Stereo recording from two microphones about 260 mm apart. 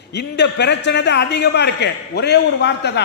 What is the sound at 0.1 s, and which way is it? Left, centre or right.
A man's voice, left.